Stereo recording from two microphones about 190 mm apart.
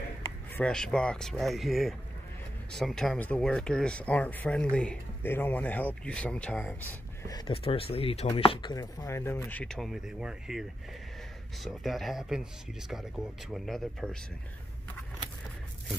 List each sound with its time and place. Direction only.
0.6 s speech: 5° left (ahead or behind)
7.3 s speech: 30° left (ahead or behind); by 10.6 s 5° right (ahead or behind)
11.6 s speech: centre (ahead or behind)